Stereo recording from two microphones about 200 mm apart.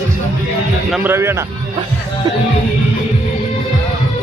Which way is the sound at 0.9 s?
10° right (ahead or behind).